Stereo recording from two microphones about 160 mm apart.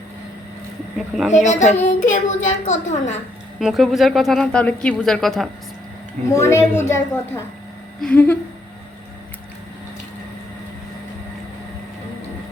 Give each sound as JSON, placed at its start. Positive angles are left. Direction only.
{"t": 0.9, "sound": "speech", "side_deg": 0}
{"t": 1.5, "sound": "a child's voice", "side_deg": 50}
{"t": 3.6, "sound": "speech", "side_deg": 0}
{"t": 6.3, "sound": "a woman's voice", "side_deg": 15}